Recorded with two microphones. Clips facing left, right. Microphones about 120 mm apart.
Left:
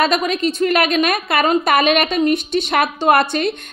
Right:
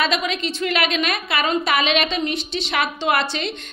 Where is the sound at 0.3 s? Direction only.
45° left (ahead or behind).